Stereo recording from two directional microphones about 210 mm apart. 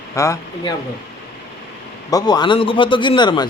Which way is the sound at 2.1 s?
20° left (ahead or behind).